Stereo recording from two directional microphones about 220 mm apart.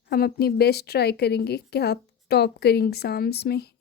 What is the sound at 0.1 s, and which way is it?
A woman's voice, 45° left (ahead or behind).